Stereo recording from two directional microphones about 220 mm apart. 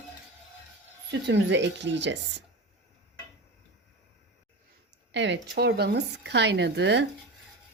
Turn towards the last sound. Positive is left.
turn(degrees=-50)  # may be behind; listen again after turning